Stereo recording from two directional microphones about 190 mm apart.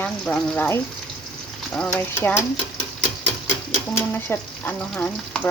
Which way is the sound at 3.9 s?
10° left (ahead or behind).